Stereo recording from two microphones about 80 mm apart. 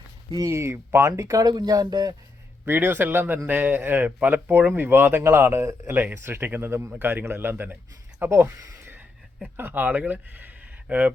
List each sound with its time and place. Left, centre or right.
0.4 s speech: right
2.6 s speech: right
8.8 s a sound: right
9.6 s speech: right